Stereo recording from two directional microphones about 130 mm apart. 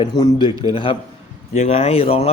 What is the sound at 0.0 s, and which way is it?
Speech, 35° left (ahead or behind).